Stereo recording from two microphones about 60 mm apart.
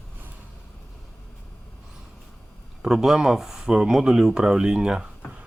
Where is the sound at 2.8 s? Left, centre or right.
Centre.